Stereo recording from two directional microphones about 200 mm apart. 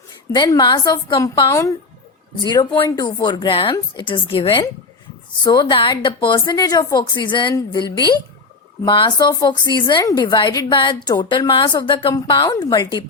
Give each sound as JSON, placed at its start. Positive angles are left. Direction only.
{"t": 0.3, "sound": "a woman's voice", "side_deg": 20}